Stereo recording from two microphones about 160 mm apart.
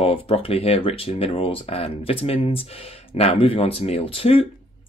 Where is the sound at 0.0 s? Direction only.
35° left (ahead or behind).